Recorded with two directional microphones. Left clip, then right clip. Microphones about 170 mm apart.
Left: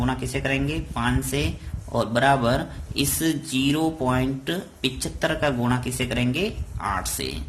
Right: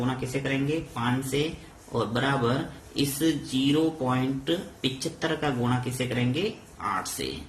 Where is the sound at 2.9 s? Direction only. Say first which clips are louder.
Left 2 dB; 50° left (ahead or behind).